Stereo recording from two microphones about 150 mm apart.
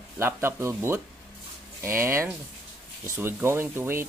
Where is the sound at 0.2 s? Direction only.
15° right (ahead or behind).